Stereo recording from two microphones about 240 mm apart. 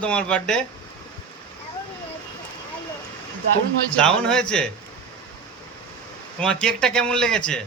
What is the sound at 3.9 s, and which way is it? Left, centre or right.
Speech, centre.